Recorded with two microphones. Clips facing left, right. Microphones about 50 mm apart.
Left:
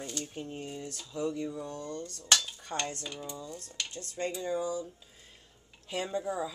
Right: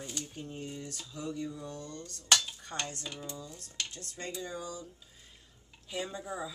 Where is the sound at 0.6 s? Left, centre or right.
Centre.